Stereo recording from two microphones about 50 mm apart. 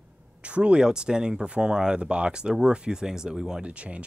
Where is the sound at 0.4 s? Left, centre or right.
Right.